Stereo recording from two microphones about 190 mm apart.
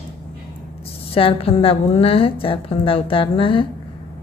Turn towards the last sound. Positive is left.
turn(degrees=25)  # may be behind; listen again after turning